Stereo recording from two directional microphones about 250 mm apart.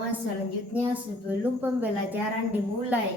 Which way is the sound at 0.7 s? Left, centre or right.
Centre.